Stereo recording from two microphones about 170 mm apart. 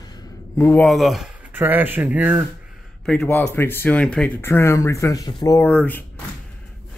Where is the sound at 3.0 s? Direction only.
5° left (ahead or behind); by 5.6 s 20° left (ahead or behind).